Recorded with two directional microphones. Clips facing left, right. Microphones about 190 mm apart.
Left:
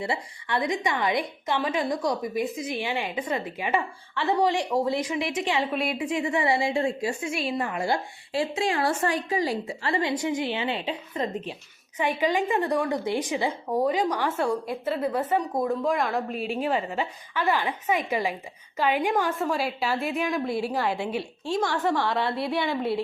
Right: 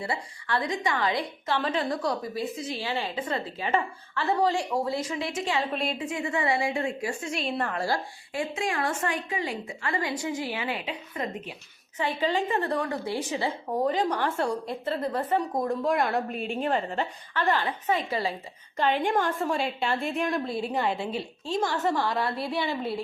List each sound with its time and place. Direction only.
0.0 s a woman's voice: 20° left (ahead or behind)
6.1 s a woman's voice: 20° left (ahead or behind)
7.2 s a woman's voice: 10° left (ahead or behind)
7.9 s a woman's voice: 25° left (ahead or behind)
11.9 s a woman's voice: 15° left (ahead or behind)